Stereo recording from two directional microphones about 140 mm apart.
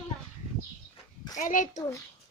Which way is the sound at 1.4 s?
70° left (ahead or behind).